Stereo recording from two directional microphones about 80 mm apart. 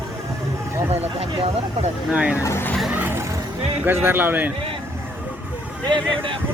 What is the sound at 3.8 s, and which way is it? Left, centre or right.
Speech, right.